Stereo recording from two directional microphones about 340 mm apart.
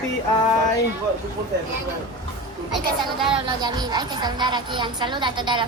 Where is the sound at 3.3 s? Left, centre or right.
Centre.